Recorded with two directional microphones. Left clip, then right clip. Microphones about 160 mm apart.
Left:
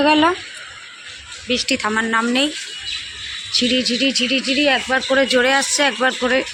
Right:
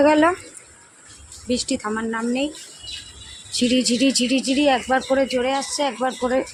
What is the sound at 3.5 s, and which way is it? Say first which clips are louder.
Speech: left 3 dB; 25° right (ahead or behind).